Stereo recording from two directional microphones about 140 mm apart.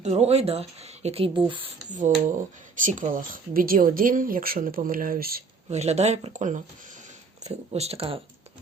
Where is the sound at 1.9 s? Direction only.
60° right (ahead or behind); by 5.4 s 85° right.